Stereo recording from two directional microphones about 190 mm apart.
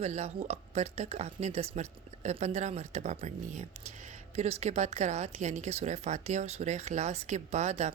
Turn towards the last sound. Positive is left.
turn(degrees=-35)  # may be behind; listen again after turning